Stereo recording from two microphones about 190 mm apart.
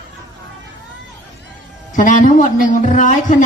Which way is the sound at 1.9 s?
45° left (ahead or behind).